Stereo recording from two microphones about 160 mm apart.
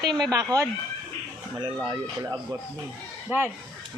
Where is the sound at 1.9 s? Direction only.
20° right (ahead or behind).